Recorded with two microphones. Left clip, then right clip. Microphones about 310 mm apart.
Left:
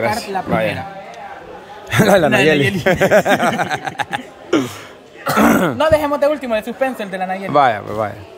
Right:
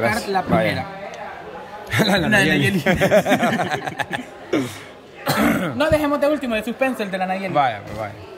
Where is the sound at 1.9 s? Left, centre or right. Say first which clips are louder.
Left 6 dB; centre.